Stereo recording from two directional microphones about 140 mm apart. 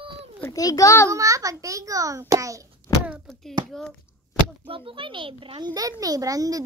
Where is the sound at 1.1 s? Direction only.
25° right (ahead or behind).